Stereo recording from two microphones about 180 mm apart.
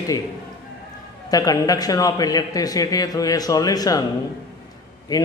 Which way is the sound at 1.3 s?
20° left (ahead or behind).